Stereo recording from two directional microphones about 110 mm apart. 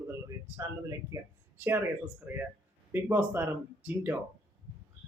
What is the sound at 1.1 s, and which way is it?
Speech, 25° right (ahead or behind).